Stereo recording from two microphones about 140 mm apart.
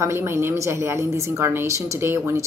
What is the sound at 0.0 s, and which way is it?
A woman's voice, 20° right (ahead or behind).